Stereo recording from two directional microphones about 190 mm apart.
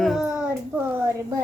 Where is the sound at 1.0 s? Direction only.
15° right (ahead or behind).